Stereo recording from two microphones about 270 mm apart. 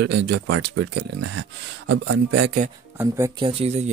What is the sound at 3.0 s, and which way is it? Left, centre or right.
Speech, centre.